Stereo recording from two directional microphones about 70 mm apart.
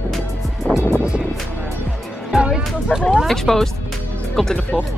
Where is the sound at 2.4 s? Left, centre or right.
Centre.